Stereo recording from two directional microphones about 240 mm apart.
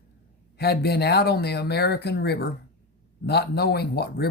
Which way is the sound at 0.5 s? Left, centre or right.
Left.